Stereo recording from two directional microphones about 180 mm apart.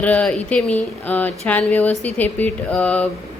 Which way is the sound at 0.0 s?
5° left (ahead or behind).